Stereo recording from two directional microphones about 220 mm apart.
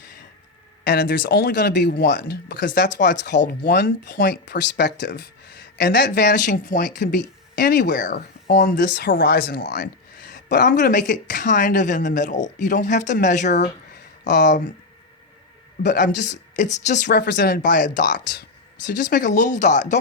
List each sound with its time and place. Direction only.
0.9 s speech: 45° left (ahead or behind)
10.5 s speech: 40° left (ahead or behind)
15.9 s speech: 35° left (ahead or behind)
17.1 s speech: 50° left (ahead or behind); by 20.0 s 35° left (ahead or behind)